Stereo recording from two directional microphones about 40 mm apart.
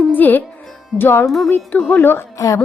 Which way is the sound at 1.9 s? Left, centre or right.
Left.